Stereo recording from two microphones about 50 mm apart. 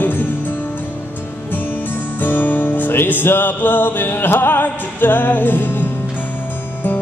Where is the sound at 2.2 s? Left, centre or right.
Left.